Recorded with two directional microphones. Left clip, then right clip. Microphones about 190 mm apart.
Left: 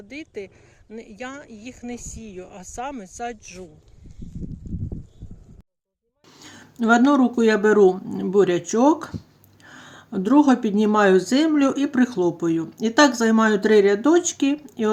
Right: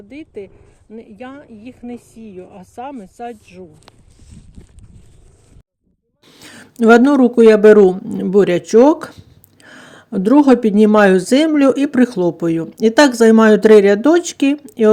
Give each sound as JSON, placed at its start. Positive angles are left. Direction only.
{"t": 0.1, "sound": "speech", "side_deg": 5}
{"t": 6.4, "sound": "speech", "side_deg": -45}